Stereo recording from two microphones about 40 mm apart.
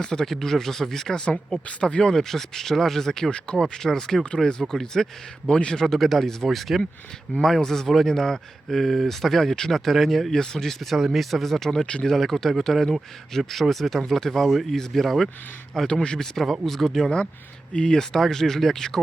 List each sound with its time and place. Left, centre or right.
0.0 s speech: centre
0.3 s speech: centre
1.8 s speech: left
2.1 s speech: centre
5.5 s speech: left
5.8 s speech: centre
10.9 s speech: centre
15.9 s speech: left
16.4 s speech: centre